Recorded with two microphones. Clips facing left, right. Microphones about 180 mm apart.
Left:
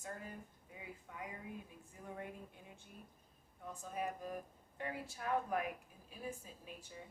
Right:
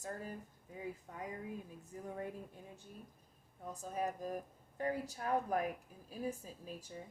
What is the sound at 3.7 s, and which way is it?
A woman's voice, 40° right (ahead or behind).